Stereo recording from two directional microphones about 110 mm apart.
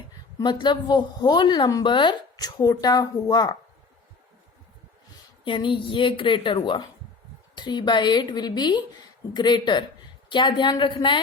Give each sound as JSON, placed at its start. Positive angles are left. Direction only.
{"t": 0.3, "sound": "a woman's voice", "side_deg": 45}
{"t": 5.5, "sound": "a woman's voice", "side_deg": 50}